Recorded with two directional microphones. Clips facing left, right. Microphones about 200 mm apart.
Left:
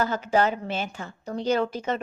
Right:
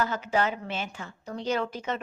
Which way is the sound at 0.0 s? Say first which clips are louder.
Left 4 dB; 35° left (ahead or behind).